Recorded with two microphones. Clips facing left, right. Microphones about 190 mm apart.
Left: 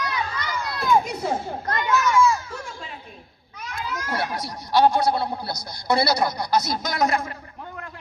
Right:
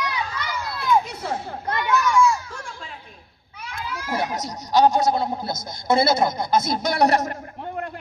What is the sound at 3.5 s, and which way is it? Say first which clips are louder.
Speech: left 1 dB; 10° right (ahead or behind).